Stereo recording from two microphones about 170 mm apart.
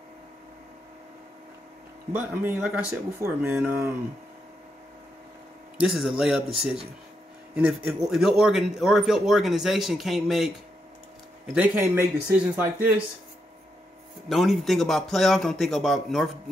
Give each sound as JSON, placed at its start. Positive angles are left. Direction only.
{"t": 2.1, "sound": "speech", "side_deg": -10}
{"t": 5.8, "sound": "a man's voice", "side_deg": 0}
{"t": 7.5, "sound": "a man's voice", "side_deg": -10}
{"t": 11.5, "sound": "speech", "side_deg": -10}
{"t": 14.3, "sound": "a man's voice", "side_deg": 0}